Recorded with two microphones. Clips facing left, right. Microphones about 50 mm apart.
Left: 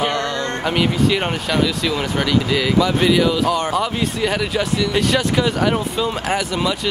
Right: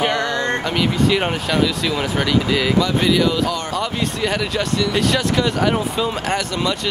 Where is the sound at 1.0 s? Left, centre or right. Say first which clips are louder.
Even; centre.